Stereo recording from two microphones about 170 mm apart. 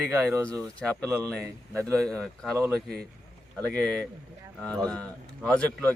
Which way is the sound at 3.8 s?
5° left (ahead or behind).